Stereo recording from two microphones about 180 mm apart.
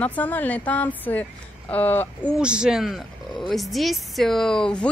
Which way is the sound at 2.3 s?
5° right (ahead or behind).